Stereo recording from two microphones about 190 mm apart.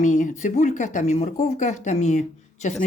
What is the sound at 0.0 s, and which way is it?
Speech, 40° left (ahead or behind).